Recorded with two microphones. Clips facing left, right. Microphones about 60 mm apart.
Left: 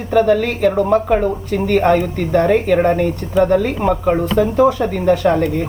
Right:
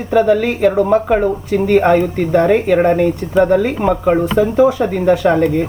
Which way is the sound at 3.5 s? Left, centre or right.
Centre.